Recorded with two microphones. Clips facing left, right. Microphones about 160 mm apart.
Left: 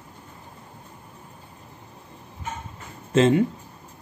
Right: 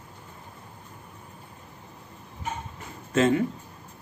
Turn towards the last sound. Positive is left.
turn(degrees=25)  # may be behind; listen again after turning